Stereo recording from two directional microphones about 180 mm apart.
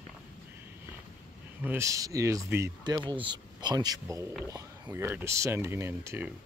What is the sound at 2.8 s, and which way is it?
Speech, 25° right (ahead or behind).